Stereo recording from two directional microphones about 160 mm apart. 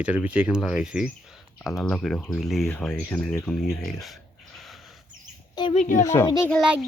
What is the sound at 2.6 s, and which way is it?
Speech, 10° left (ahead or behind).